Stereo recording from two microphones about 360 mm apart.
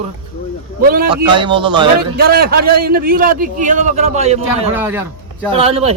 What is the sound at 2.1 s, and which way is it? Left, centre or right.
A man's voice, right.